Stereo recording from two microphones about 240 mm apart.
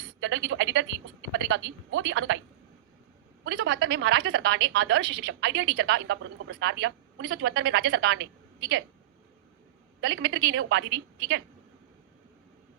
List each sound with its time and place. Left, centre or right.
0.2 s a woman's voice: right
3.4 s a woman's voice: right
10.0 s a woman's voice: right